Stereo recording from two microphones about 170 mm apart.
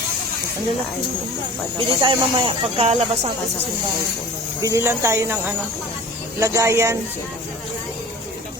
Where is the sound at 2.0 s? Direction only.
30° right (ahead or behind).